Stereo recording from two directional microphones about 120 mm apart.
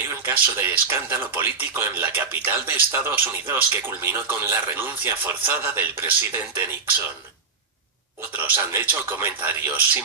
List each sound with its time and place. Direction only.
0.3 s speech: 15° right (ahead or behind)
8.3 s speech: 15° right (ahead or behind)